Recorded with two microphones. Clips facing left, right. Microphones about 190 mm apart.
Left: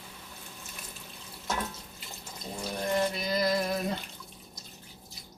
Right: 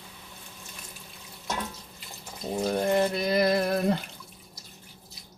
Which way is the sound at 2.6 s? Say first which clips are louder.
Right 5 dB; 55° right (ahead or behind).